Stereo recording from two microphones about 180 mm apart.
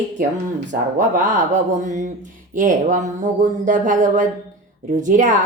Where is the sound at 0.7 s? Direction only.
45° right (ahead or behind).